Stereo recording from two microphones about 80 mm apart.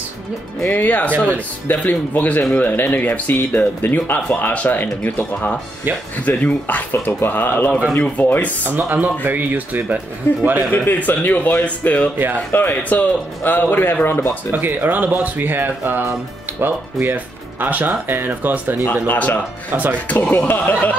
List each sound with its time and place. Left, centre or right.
0.7 s speech: left
7.9 s speech: centre
8.6 s speech: right
10.3 s speech: left
14.5 s speech: right
19.0 s speech: centre
19.7 s speech: right
20.1 s speech: centre